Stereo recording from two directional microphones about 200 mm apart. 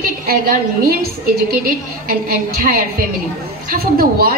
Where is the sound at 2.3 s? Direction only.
45° right (ahead or behind).